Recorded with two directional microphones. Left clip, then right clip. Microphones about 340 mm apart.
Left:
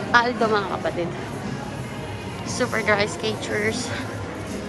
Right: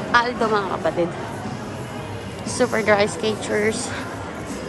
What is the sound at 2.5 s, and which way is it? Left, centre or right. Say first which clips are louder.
Speech: right 3 dB; centre.